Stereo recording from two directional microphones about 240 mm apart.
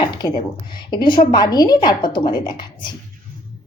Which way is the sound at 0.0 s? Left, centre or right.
Centre.